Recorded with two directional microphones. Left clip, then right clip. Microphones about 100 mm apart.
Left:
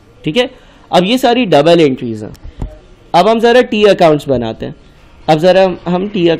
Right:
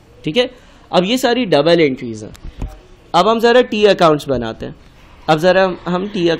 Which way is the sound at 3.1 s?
35° left (ahead or behind).